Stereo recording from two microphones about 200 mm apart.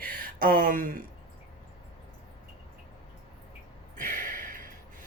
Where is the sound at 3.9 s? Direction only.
40° right (ahead or behind).